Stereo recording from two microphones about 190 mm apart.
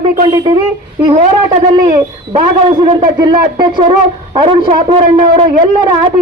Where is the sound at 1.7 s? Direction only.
25° right (ahead or behind).